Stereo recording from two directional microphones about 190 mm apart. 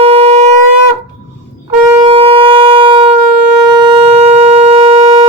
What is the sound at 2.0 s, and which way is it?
Siren, 30° right (ahead or behind).